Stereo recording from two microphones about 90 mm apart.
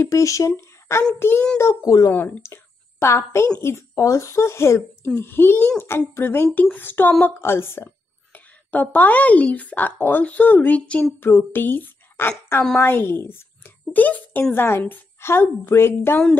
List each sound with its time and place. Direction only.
0.0 s a child's voice: 35° left (ahead or behind)
2.0 s a child's voice: 25° left (ahead or behind)